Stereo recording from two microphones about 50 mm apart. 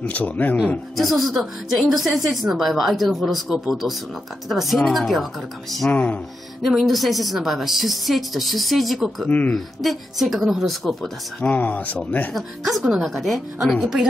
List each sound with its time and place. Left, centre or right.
0.1 s speech: left
0.9 s a woman's voice: centre
5.9 s speech: left
6.6 s a woman's voice: centre
11.4 s speech: left
12.4 s a woman's voice: centre